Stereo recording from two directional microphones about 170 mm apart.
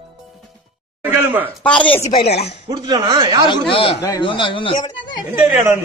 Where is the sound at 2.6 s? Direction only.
25° right (ahead or behind).